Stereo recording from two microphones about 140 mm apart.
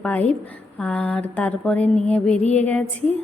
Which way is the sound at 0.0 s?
10° left (ahead or behind).